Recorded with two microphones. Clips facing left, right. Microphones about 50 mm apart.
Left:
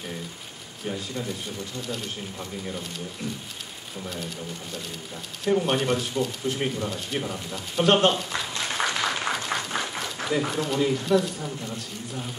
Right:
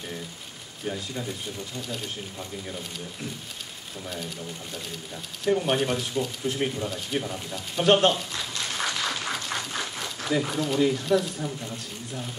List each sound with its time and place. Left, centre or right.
0.8 s speech: centre
4.0 s speech: centre
5.4 s speech: centre
8.3 s applause: left
9.9 s a sound: centre
10.5 s speech: centre